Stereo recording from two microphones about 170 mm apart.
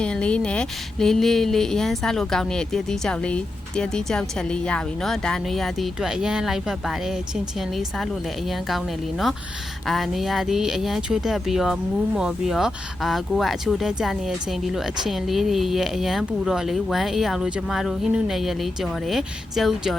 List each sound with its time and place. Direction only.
0.0 s speech: 5° left (ahead or behind)